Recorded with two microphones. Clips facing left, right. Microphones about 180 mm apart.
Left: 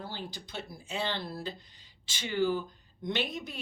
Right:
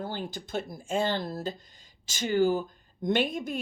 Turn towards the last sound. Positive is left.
turn(degrees=-50)  # may be behind; listen again after turning